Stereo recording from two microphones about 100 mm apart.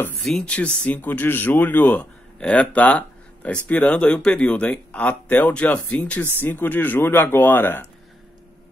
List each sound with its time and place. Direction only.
0.2 s speech: 5° left (ahead or behind)